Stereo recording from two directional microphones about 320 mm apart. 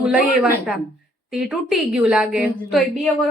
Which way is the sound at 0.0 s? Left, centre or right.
Centre.